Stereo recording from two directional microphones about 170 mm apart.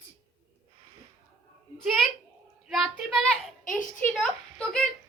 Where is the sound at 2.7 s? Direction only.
Centre (ahead or behind).